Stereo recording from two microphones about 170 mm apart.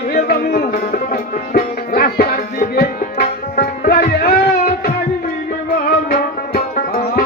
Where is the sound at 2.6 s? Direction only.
50° left (ahead or behind).